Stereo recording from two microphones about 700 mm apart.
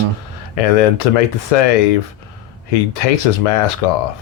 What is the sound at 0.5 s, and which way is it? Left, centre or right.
Speech, left.